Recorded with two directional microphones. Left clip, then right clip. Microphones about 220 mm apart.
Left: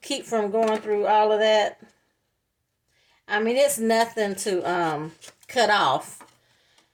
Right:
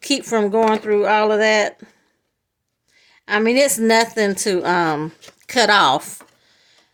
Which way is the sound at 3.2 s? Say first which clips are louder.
Right 5 dB; 50° right (ahead or behind).